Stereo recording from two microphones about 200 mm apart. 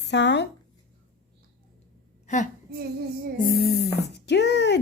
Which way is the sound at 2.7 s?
45° right (ahead or behind).